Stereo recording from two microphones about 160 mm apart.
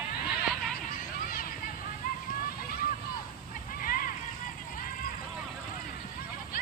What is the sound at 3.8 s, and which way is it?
Vehicle, 65° left (ahead or behind).